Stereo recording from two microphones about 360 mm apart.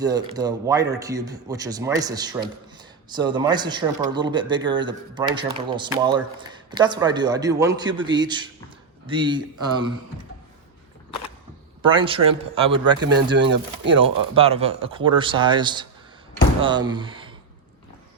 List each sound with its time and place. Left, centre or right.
0.0 s a man's voice: centre
11.8 s a man's voice: centre
13.3 s speech: right
14.0 s a man's voice: centre